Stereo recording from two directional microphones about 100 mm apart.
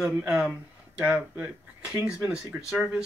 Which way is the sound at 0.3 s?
10° right (ahead or behind).